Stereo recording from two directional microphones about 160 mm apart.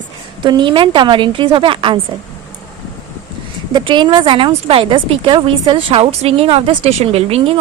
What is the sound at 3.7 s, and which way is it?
Speech, 30° right (ahead or behind).